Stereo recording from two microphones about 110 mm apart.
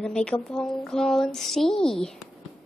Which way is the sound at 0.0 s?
10° left (ahead or behind).